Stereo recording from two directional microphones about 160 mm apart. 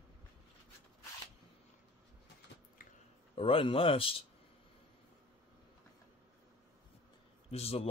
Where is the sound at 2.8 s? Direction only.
60° left (ahead or behind).